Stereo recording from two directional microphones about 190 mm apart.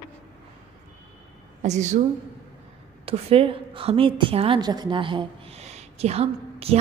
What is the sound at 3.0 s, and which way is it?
A woman's voice, 30° right (ahead or behind).